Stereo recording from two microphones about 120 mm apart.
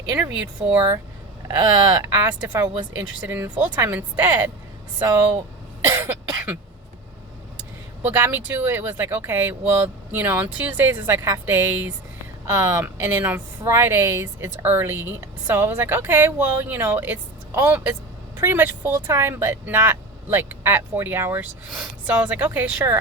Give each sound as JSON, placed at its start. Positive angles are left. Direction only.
{"t": 0.1, "sound": "speech", "side_deg": -15}
{"t": 2.0, "sound": "speech", "side_deg": -20}
{"t": 2.6, "sound": "speech", "side_deg": -35}
{"t": 3.2, "sound": "speech", "side_deg": -20}
{"t": 5.8, "sound": "cough", "side_deg": -20}
{"t": 8.0, "sound": "a woman's voice", "side_deg": -15}